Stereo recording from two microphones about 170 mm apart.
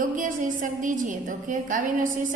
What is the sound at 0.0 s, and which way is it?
A woman's voice, 50° right (ahead or behind).